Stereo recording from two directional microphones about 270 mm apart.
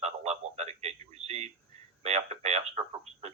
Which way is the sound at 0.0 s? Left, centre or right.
Right.